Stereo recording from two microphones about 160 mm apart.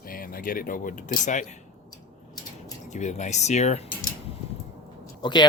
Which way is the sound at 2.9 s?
45° left (ahead or behind).